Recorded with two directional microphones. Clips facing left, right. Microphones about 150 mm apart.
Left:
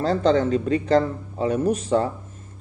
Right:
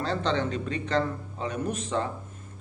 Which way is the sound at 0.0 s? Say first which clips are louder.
Left 8 dB; 40° left (ahead or behind).